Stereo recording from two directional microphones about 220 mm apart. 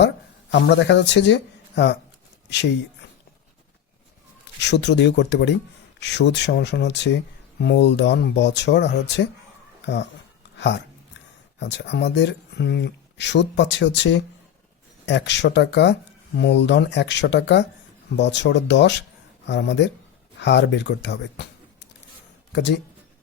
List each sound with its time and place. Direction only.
0.5 s speech: 55° left (ahead or behind)
4.6 s speech: 50° left (ahead or behind)
11.6 s speech: 50° left (ahead or behind)